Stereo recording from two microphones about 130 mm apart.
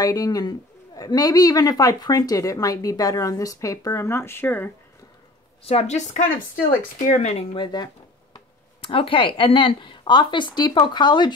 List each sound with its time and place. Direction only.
0.0 s a man's voice: 30° left (ahead or behind)
5.6 s a woman's voice: 50° left (ahead or behind)
7.5 s speech: 35° left (ahead or behind)